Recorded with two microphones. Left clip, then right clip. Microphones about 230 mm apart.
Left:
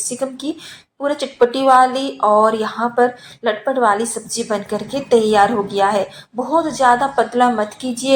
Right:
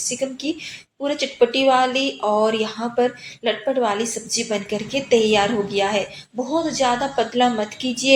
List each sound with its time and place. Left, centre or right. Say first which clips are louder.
1.0 s speech: left 3 dB; left